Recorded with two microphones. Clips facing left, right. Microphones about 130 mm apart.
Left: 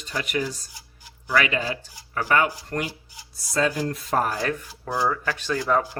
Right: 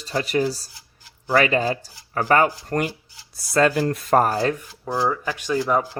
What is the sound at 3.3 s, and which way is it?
Speech, 65° right (ahead or behind).